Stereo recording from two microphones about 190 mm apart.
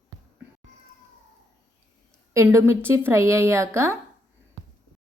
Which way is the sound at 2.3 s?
15° right (ahead or behind).